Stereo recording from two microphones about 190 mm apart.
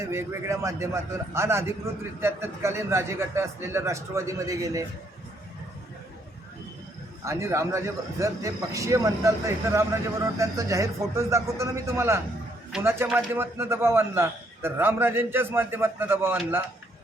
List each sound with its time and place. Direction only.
0.0 s a man's voice: 15° right (ahead or behind)
7.3 s a man's voice: 15° right (ahead or behind)